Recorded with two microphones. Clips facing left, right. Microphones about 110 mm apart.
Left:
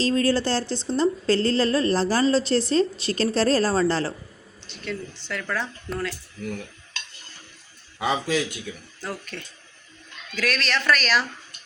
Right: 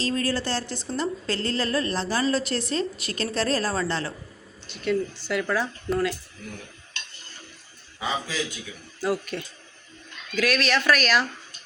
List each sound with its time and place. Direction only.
0.0 s a woman's voice: 30° left (ahead or behind)
4.6 s speech: 5° right (ahead or behind)
7.9 s a man's voice: 65° left (ahead or behind)
9.0 s speech: 5° right (ahead or behind)